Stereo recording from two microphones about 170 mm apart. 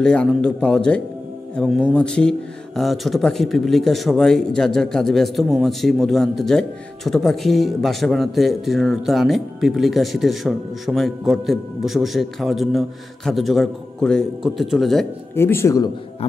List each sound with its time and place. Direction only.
0.0 s speech: 5° left (ahead or behind)
15.3 s speech: 15° left (ahead or behind)